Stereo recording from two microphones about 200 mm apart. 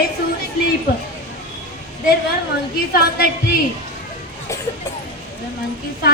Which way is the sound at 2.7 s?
50° left (ahead or behind).